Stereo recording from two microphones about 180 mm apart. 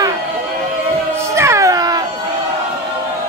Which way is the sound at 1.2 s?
15° right (ahead or behind).